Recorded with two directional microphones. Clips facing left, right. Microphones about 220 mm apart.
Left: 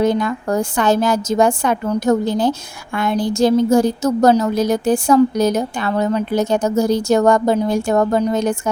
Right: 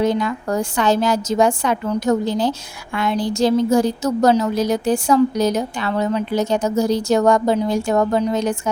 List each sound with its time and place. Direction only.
0.0 s a woman's voice: 50° left (ahead or behind)